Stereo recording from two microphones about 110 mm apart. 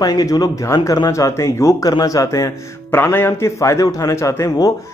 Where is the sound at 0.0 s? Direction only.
35° left (ahead or behind).